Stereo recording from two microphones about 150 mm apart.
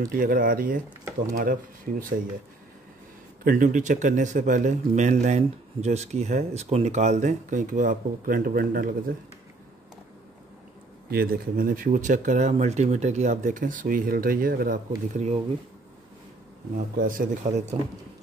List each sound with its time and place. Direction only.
0.0 s speech: 70° right (ahead or behind)
3.4 s speech: 60° right (ahead or behind)
11.1 s speech: 85° right
15.1 s speech: 45° right (ahead or behind)
16.7 s speech: 65° right (ahead or behind)